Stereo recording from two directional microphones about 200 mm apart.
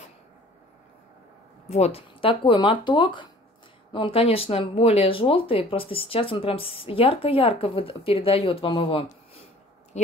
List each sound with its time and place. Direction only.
1.7 s speech: 30° left (ahead or behind)